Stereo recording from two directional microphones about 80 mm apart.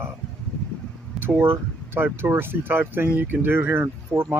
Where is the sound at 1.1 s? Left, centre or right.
Right.